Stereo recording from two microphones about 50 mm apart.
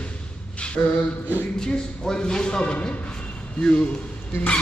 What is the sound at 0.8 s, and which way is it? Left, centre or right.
Vocal music, left.